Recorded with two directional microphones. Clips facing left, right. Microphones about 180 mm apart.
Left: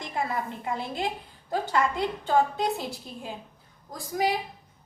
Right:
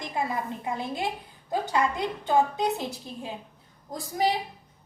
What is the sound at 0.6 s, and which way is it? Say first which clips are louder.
A woman's voice: even; 15° right (ahead or behind).